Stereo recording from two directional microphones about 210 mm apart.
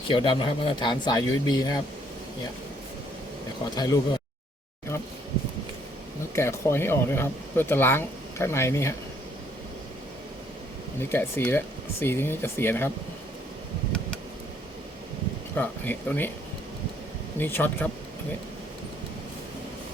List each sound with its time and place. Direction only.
0.1 s speech: 25° left (ahead or behind)
3.8 s speech: 15° left (ahead or behind)
6.3 s speech: 15° left (ahead or behind)
11.1 s speech: 10° left (ahead or behind)
15.5 s speech: 10° left (ahead or behind)
17.3 s speech: 10° left (ahead or behind)